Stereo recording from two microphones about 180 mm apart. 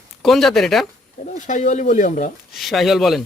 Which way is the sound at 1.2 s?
40° left (ahead or behind).